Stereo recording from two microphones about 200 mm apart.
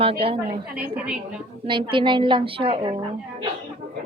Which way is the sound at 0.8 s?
5° right (ahead or behind).